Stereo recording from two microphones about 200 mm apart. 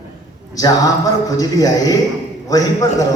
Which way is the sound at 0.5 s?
20° left (ahead or behind).